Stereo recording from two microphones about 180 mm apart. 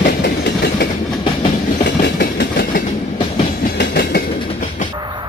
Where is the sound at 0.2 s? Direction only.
65° left (ahead or behind).